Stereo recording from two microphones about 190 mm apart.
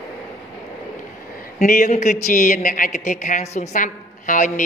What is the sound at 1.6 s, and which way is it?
Speech, 40° left (ahead or behind).